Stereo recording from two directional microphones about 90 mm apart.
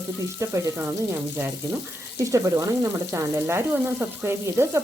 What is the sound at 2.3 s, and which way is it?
Frying, 35° right (ahead or behind).